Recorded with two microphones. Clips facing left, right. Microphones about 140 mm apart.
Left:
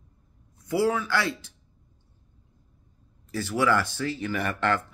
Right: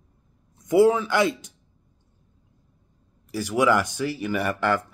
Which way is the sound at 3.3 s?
15° right (ahead or behind).